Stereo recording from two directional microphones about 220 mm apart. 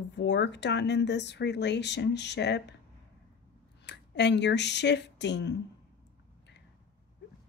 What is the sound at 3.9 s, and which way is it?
Speech, 50° left (ahead or behind).